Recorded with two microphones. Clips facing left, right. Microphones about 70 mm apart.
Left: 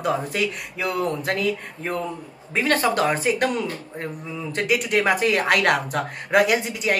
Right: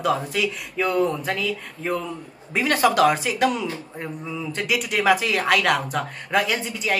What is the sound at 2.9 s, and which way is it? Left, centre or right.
Speech, left.